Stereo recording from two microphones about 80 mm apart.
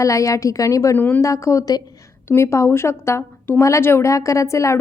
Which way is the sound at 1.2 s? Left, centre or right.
Left.